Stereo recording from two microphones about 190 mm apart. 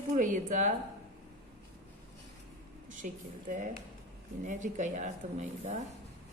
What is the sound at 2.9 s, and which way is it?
A woman's voice, 40° right (ahead or behind).